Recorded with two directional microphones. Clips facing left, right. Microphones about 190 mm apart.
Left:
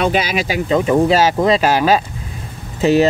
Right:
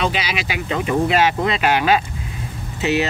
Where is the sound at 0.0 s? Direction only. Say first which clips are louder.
Left 6 dB; 50° left (ahead or behind).